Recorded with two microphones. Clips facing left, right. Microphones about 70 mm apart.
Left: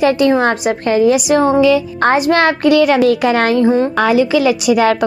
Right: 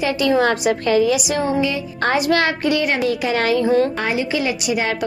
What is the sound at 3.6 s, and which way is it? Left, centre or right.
Speech, left.